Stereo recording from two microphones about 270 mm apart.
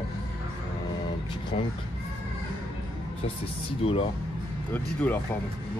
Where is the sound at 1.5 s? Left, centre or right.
Left.